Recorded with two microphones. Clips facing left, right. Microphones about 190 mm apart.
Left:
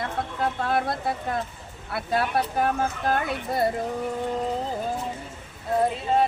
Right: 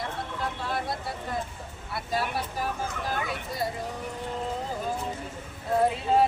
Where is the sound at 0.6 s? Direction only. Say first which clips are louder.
Left 8 dB; 60° left (ahead or behind).